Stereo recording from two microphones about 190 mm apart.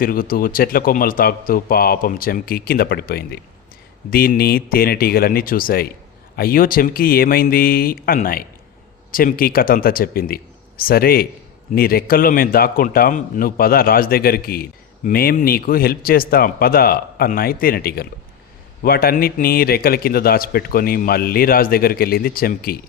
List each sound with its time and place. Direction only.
0.0 s a man's voice: 50° left (ahead or behind)